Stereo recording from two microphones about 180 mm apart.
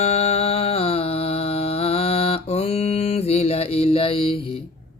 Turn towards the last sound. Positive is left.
turn(degrees=30)  # may be behind; listen again after turning